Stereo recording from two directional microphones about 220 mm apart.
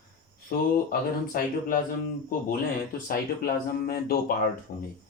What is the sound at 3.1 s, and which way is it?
Speech, 40° left (ahead or behind).